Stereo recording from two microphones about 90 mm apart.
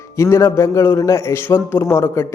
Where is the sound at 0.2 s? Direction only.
35° left (ahead or behind).